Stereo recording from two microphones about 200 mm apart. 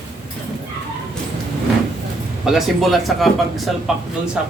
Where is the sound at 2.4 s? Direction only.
Centre (ahead or behind).